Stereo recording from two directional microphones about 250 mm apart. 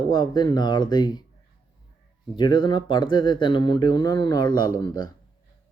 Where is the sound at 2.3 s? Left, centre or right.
Centre.